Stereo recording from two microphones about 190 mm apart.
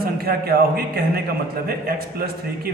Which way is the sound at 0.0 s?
55° right (ahead or behind).